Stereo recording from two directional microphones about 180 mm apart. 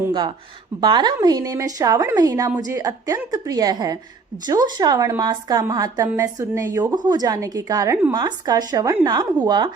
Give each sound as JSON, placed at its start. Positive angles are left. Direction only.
{"t": 0.1, "sound": "a woman's voice", "side_deg": -25}